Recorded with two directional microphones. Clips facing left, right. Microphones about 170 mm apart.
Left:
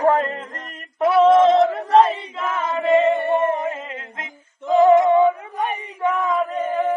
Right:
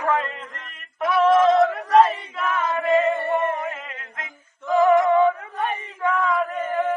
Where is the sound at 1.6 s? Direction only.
25° left (ahead or behind).